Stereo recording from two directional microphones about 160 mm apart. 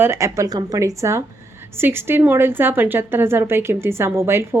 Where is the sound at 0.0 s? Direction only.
15° right (ahead or behind).